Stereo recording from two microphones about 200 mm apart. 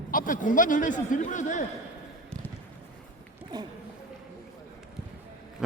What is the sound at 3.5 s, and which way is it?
Speech, 20° right (ahead or behind).